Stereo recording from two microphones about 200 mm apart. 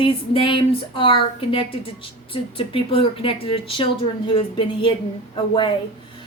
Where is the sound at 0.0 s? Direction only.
25° left (ahead or behind).